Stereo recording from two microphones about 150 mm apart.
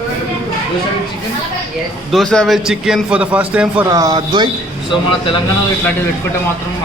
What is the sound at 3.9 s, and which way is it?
Speech, 25° right (ahead or behind).